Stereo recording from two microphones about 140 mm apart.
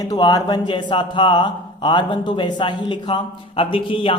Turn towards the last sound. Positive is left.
turn(degrees=40)  # may be behind; listen again after turning